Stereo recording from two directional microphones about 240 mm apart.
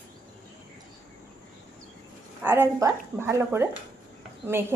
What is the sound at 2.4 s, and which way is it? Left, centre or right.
A woman's voice, centre.